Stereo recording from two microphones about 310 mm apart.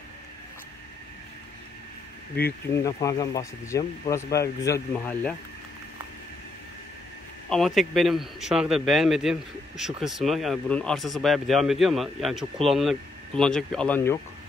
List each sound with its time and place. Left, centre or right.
2.8 s speech: centre
7.4 s a man's voice: centre